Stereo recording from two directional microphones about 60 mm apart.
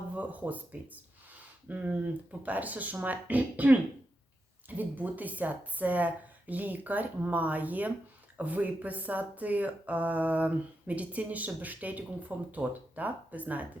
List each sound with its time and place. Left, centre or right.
0.2 s speech: right
4.8 s speech: right